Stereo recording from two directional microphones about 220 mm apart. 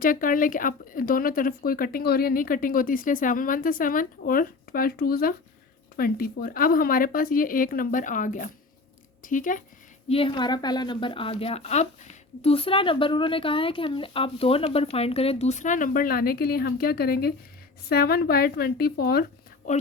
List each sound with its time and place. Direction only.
0.0 s speech: 40° left (ahead or behind)
10.1 s a woman's voice: 25° left (ahead or behind)